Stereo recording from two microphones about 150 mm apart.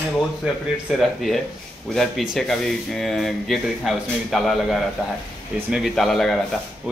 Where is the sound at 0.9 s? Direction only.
Centre (ahead or behind).